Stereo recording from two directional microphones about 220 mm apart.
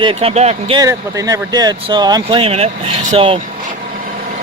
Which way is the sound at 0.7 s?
15° right (ahead or behind).